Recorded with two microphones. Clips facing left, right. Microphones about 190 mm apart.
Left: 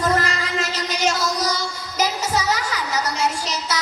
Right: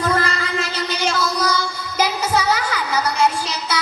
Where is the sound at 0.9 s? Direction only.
60° right (ahead or behind).